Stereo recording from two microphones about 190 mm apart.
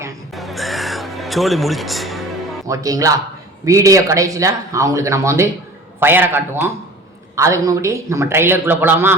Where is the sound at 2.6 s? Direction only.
15° right (ahead or behind).